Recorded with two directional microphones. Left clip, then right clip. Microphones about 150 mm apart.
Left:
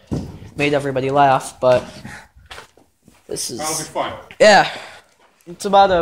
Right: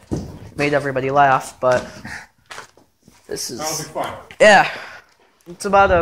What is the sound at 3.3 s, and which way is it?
Speech, 20° left (ahead or behind).